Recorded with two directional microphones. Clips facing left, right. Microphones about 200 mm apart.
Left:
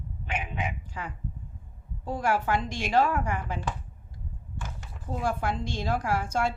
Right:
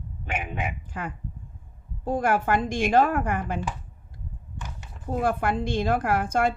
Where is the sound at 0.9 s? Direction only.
55° right (ahead or behind).